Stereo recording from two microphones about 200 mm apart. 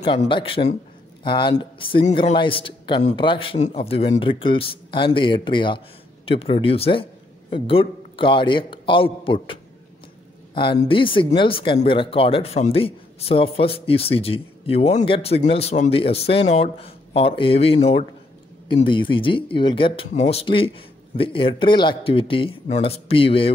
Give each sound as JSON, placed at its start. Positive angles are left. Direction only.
{"t": 0.2, "sound": "speech", "side_deg": 25}